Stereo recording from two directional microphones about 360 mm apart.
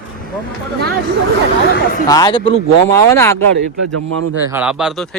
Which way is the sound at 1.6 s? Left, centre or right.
Left.